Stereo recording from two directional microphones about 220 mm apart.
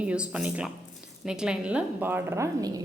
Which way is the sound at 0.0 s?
5° right (ahead or behind).